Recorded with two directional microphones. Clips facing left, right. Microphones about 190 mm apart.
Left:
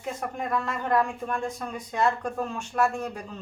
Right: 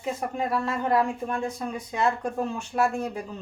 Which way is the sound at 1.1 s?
20° right (ahead or behind).